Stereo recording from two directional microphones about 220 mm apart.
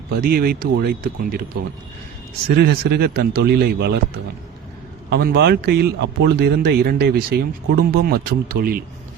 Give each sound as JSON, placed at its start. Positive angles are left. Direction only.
{"t": 0.2, "sound": "a man's voice", "side_deg": -45}
{"t": 2.6, "sound": "a man's voice", "side_deg": -45}
{"t": 5.0, "sound": "a man's voice", "side_deg": -50}